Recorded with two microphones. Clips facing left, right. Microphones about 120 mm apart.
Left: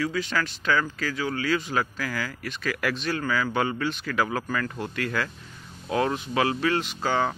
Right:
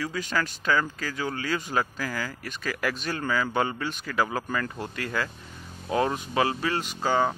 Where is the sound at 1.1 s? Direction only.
40° right (ahead or behind).